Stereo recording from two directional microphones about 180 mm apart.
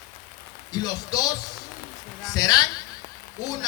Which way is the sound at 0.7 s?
20° left (ahead or behind).